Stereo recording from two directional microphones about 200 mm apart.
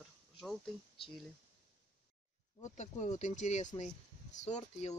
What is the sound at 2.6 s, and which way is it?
Speech, 35° left (ahead or behind).